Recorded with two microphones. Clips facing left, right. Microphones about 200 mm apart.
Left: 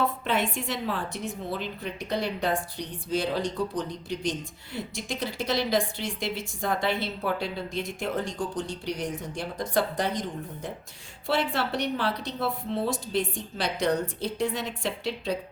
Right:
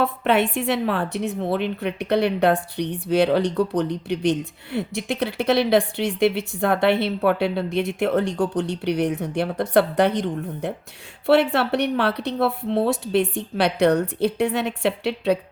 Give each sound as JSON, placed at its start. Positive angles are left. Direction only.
{"t": 0.0, "sound": "a woman's voice", "side_deg": -65}